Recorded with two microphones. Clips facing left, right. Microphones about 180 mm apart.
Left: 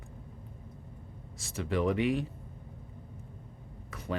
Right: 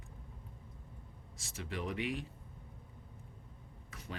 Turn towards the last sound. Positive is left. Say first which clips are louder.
# left 11 dB
turn(degrees=65)  # may be behind; listen again after turning